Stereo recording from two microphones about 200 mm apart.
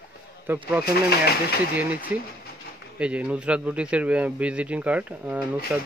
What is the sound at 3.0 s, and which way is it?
A man's voice, 5° right (ahead or behind).